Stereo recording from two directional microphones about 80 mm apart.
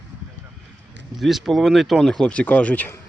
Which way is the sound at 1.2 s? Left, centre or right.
Centre.